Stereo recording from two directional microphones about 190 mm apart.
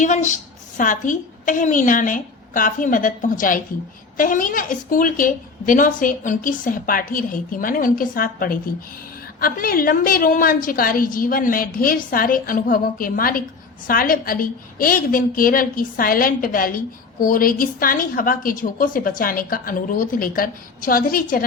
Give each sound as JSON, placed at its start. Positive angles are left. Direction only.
{"t": 0.0, "sound": "a woman's voice", "side_deg": 40}